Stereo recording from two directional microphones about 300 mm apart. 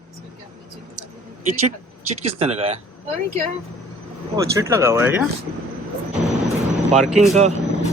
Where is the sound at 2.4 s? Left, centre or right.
Centre.